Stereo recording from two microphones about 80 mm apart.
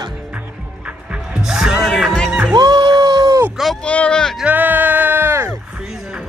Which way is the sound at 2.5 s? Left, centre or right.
Right.